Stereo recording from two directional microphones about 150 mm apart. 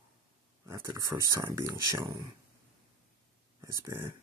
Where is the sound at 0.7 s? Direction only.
20° right (ahead or behind).